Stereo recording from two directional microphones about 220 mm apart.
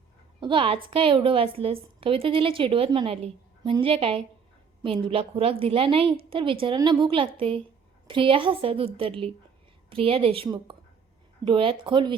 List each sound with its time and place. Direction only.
0.3 s a woman's voice: 20° right (ahead or behind)